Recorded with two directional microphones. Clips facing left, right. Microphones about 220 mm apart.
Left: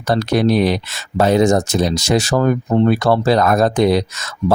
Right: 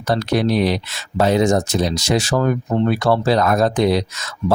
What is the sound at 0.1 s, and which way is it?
Speech, 45° left (ahead or behind).